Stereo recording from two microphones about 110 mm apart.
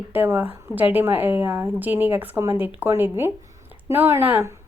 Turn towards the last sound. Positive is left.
turn(degrees=-20)  # may be behind; listen again after turning